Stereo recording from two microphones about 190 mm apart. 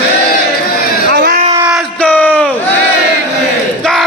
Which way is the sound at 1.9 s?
5° left (ahead or behind).